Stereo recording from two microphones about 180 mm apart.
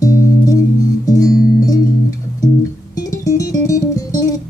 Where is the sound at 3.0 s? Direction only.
20° left (ahead or behind).